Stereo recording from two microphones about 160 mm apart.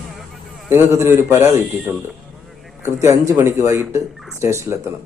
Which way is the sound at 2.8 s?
20° right (ahead or behind).